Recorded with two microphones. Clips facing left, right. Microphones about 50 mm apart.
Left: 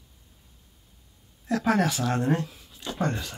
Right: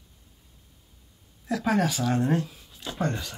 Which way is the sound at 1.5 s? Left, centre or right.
Centre.